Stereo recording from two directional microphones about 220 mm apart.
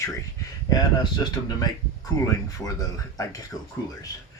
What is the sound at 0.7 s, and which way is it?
Speech, 15° left (ahead or behind).